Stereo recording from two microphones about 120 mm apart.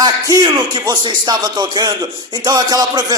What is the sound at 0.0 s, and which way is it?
A man's voice, 35° right (ahead or behind).